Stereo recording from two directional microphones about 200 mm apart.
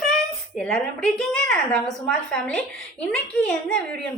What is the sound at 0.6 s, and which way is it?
A woman's voice, centre (ahead or behind).